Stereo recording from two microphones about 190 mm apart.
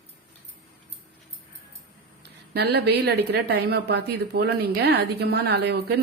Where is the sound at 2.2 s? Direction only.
60° right (ahead or behind).